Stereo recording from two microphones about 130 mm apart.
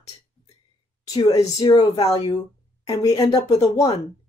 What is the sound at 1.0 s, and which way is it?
Speech, 30° left (ahead or behind).